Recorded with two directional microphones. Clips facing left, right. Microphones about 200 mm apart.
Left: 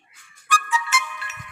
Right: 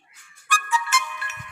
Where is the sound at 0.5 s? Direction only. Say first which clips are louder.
Left 1 dB; 55° right (ahead or behind).